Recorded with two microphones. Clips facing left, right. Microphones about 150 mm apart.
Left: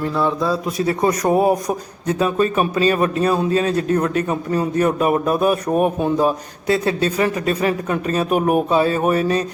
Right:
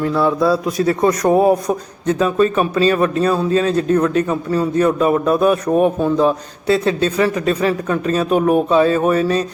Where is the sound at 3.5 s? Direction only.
35° right (ahead or behind).